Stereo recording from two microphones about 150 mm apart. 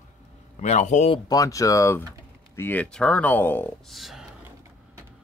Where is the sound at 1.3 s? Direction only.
20° left (ahead or behind).